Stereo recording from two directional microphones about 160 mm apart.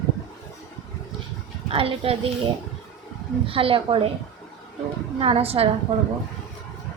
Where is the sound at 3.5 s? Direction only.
35° right (ahead or behind).